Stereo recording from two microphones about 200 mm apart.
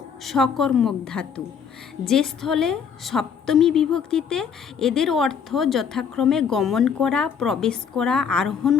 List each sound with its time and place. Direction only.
0.3 s a woman's voice: centre (ahead or behind)